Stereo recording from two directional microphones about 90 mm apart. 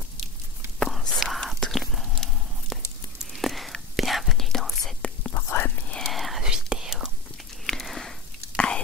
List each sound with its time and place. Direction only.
0.8 s whispering: 5° left (ahead or behind)
5.3 s whispering: 30° left (ahead or behind)
5.9 s whispering: 10° left (ahead or behind)
7.6 s a sound: 5° left (ahead or behind)
8.5 s whispering: 10° left (ahead or behind)